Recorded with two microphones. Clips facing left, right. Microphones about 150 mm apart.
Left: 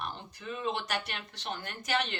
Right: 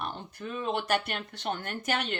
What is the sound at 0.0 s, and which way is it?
A man's voice, 55° right (ahead or behind).